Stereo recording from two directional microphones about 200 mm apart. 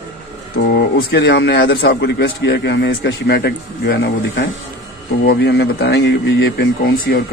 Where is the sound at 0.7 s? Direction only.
55° left (ahead or behind).